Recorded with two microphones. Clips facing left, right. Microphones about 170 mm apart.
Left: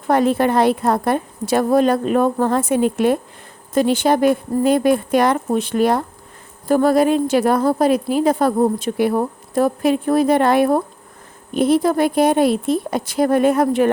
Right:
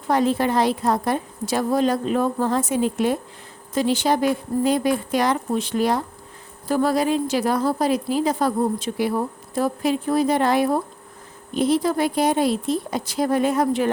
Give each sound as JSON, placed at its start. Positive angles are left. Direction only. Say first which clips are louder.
{"t": 0.1, "sound": "a woman's voice", "louder": "left 4 dB", "side_deg": 55}